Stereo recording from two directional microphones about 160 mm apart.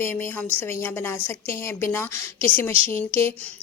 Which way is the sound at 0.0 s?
15° left (ahead or behind).